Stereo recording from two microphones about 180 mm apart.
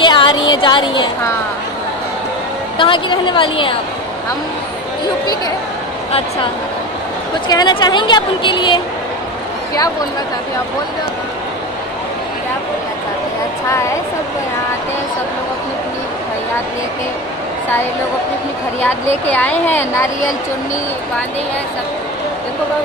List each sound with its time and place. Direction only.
0.0 s a sound: 25° left (ahead or behind)
2.8 s a woman's voice: 25° left (ahead or behind)
7.4 s a woman's voice: 25° left (ahead or behind)
18.8 s speech: 10° left (ahead or behind)